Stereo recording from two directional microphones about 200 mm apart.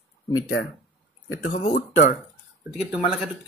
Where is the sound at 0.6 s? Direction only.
60° left (ahead or behind).